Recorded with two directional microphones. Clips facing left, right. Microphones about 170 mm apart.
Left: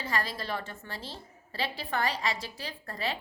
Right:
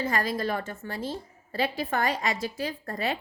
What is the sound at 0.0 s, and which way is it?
A woman's voice, 45° right (ahead or behind).